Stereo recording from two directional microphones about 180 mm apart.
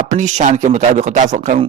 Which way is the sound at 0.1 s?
40° right (ahead or behind).